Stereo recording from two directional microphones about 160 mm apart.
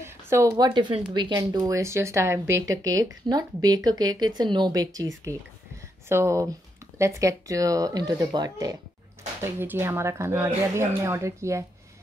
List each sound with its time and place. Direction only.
0.0 s speech: 15° right (ahead or behind)